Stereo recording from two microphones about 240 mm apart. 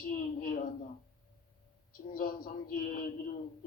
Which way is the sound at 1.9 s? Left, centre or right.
Left.